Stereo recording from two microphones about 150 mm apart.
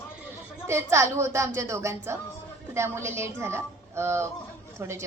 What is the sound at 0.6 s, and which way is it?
A woman's voice, 20° right (ahead or behind).